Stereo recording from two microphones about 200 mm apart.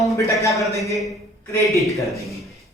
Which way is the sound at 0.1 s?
15° left (ahead or behind).